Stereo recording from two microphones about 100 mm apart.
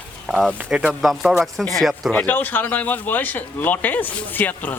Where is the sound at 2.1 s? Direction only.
15° left (ahead or behind).